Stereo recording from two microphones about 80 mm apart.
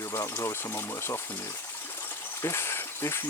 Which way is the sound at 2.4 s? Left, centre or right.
Left.